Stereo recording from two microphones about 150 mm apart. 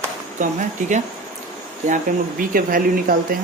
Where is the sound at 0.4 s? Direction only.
60° right (ahead or behind).